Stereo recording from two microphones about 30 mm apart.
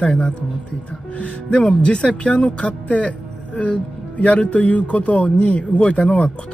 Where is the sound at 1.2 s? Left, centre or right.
Left.